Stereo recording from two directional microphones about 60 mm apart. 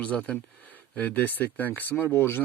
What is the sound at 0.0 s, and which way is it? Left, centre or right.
Speech, left.